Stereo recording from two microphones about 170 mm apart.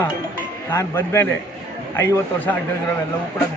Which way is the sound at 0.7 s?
15° left (ahead or behind).